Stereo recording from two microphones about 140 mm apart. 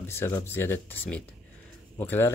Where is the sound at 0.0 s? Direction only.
15° left (ahead or behind).